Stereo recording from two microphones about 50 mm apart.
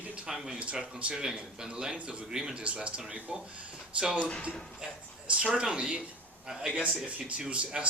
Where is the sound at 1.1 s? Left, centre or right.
Centre.